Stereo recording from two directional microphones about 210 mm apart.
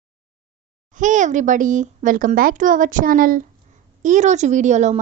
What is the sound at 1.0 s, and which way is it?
Speech, 35° right (ahead or behind).